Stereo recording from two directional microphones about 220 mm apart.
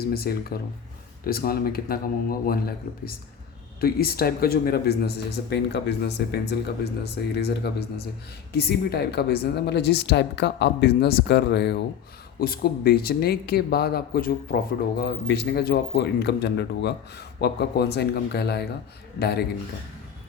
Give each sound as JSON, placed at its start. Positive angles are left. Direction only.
{"t": 0.0, "sound": "speech", "side_deg": 45}